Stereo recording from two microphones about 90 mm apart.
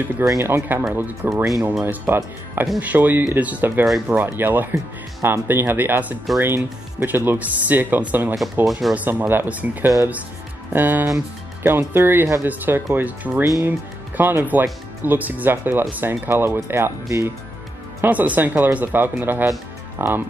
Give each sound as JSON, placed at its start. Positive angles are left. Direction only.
{"t": 0.2, "sound": "speech", "side_deg": -30}
{"t": 18.0, "sound": "speech", "side_deg": -20}